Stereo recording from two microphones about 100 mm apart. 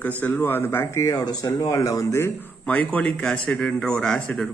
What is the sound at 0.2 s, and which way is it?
Speech, 20° left (ahead or behind).